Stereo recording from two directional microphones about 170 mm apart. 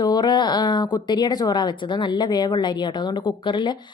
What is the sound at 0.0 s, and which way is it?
A woman's voice, 25° left (ahead or behind).